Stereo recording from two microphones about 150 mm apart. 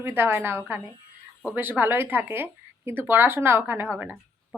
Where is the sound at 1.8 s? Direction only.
15° right (ahead or behind).